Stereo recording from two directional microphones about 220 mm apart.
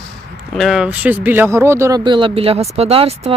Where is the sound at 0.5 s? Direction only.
Centre (ahead or behind).